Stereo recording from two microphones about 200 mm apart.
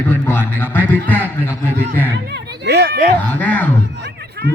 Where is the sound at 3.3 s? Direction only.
10° left (ahead or behind).